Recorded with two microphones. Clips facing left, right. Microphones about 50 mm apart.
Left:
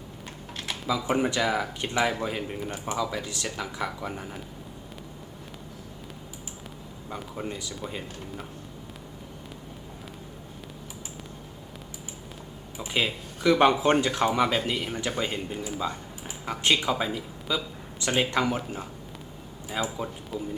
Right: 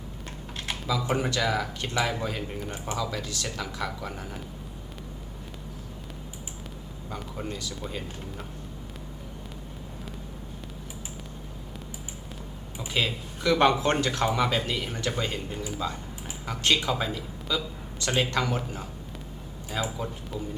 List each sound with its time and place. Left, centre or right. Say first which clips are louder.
1.0 s speech: left 2 dB; centre
7.1 s speech: left 1 dB; centre
7.4 s speech: even; centre
7.8 s speech: even; centre
12.9 s speech: left 1 dB; centre